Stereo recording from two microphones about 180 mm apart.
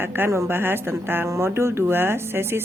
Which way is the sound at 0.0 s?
10° right (ahead or behind).